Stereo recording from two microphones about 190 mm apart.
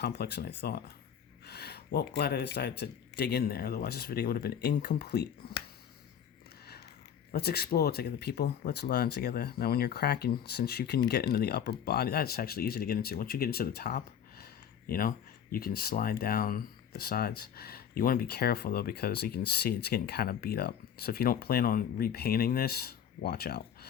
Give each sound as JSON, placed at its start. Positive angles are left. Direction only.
{"t": 0.0, "sound": "speech", "side_deg": 60}
{"t": 7.3, "sound": "speech", "side_deg": 55}